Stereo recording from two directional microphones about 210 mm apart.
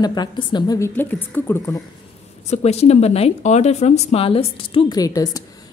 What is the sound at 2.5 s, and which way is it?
Speech, 30° left (ahead or behind).